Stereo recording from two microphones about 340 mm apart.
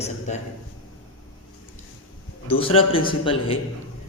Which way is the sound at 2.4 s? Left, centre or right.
Centre.